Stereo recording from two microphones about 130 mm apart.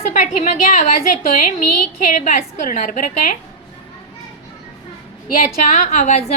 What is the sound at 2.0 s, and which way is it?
A woman's voice, 80° left.